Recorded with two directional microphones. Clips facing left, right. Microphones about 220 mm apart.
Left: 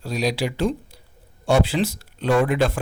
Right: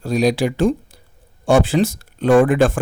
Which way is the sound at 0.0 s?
50° right (ahead or behind).